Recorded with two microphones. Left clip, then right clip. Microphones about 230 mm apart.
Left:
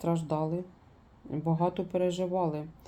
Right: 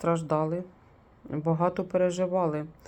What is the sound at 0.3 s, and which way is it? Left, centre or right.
Speech, right.